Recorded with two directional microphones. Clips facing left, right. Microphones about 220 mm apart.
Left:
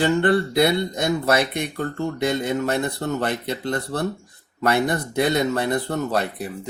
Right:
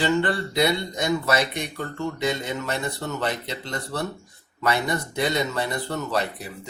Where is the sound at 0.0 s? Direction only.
55° left (ahead or behind).